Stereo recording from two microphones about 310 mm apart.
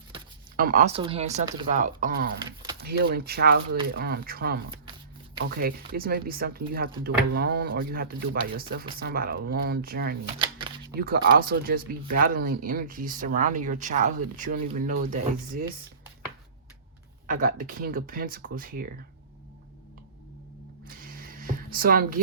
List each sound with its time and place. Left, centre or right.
0.1 s speech: right
10.3 s shuffling cards: centre
10.9 s speech: right
17.2 s speech: right
20.8 s a sound: right